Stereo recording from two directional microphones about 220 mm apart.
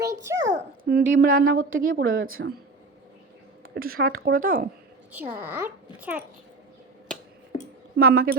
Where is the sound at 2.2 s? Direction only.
65° right (ahead or behind).